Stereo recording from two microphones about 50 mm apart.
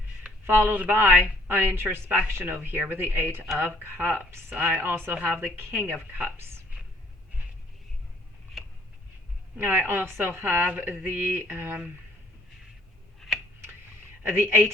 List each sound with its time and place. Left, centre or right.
0.4 s speech: right
4.8 s speech: right
5.1 s a woman's voice: right
5.5 s speech: right
9.6 s speech: right
13.1 s a sound: centre
14.3 s speech: right